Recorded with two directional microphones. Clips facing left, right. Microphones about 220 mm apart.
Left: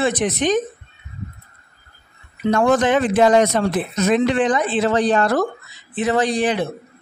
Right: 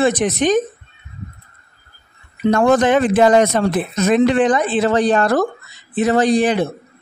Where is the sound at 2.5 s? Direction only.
45° right (ahead or behind).